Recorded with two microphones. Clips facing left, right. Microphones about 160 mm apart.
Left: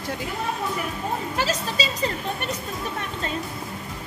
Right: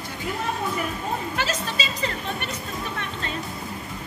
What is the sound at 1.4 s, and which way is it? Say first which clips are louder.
Speech: left 2 dB; 35° left (ahead or behind).